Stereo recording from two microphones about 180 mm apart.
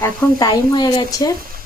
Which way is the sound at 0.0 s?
15° left (ahead or behind).